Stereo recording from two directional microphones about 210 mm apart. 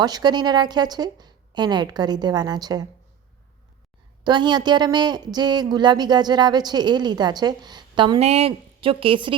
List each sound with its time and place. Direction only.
0.0 s speech: 20° right (ahead or behind)
4.2 s speech: 20° right (ahead or behind)